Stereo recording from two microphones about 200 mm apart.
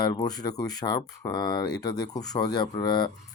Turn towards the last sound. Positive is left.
turn(degrees=20)  # may be behind; listen again after turning